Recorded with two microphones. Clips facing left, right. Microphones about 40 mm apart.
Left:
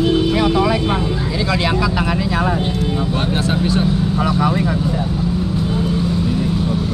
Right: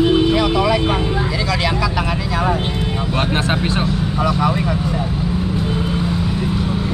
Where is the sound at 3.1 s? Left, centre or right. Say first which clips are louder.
Even; right.